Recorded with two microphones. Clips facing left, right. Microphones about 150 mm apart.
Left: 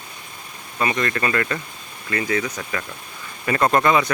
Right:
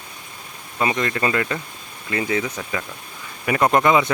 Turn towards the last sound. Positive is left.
turn(degrees=-20)  # may be behind; listen again after turning